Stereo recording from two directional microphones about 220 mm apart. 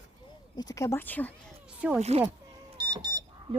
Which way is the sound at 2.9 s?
20° right (ahead or behind).